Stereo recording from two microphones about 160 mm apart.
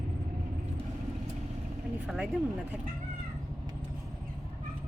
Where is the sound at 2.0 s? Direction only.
5° right (ahead or behind).